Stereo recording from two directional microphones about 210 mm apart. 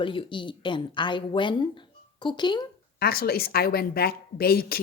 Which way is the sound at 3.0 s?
45° left (ahead or behind).